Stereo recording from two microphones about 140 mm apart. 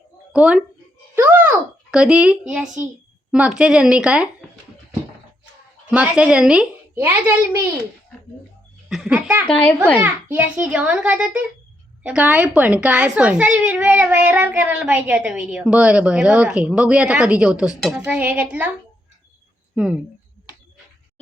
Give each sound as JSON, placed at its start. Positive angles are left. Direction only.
{"t": 0.3, "sound": "a woman's voice", "side_deg": -10}
{"t": 5.9, "sound": "a woman's voice", "side_deg": -10}
{"t": 8.9, "sound": "a woman's voice", "side_deg": -5}
{"t": 9.6, "sound": "a child's voice", "side_deg": 10}
{"t": 10.0, "sound": "a woman's voice", "side_deg": -10}
{"t": 19.7, "sound": "speech", "side_deg": -5}